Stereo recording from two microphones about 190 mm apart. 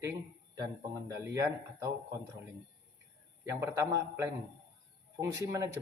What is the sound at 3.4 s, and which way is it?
Speech, 15° right (ahead or behind).